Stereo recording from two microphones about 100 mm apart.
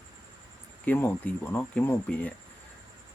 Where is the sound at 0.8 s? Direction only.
20° left (ahead or behind).